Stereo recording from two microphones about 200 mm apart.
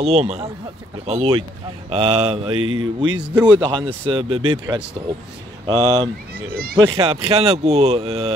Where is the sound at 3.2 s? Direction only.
5° right (ahead or behind).